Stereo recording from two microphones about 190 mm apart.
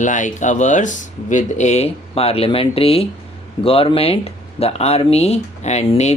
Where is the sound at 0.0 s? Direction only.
40° left (ahead or behind).